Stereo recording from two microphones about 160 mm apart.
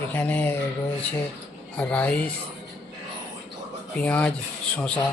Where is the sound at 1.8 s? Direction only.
10° left (ahead or behind).